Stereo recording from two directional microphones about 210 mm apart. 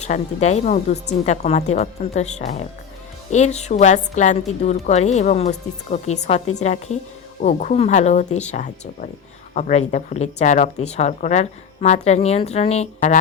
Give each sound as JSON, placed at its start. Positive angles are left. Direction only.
{"t": 0.0, "sound": "speech", "side_deg": 35}